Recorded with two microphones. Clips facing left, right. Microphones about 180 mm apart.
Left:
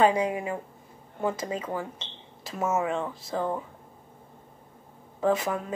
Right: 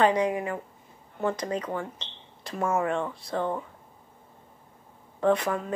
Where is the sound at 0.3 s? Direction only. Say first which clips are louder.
Right 1 dB; 20° left (ahead or behind).